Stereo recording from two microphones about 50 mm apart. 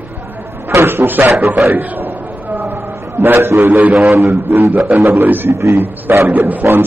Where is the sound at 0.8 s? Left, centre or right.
Right.